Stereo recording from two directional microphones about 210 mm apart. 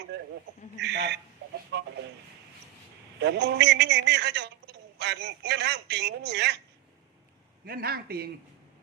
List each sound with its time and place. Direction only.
0.1 s a man's voice: 55° right (ahead or behind)
3.2 s a man's voice: 55° right (ahead or behind)
7.6 s a man's voice: 45° right (ahead or behind)